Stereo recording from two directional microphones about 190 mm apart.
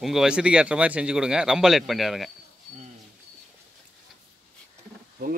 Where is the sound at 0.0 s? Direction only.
Centre (ahead or behind).